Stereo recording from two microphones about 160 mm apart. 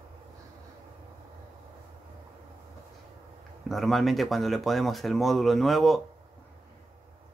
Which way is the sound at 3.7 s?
Centre (ahead or behind).